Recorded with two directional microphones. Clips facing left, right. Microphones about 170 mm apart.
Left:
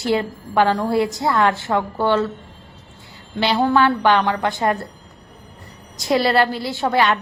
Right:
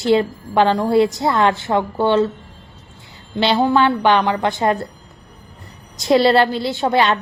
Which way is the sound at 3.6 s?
15° right (ahead or behind).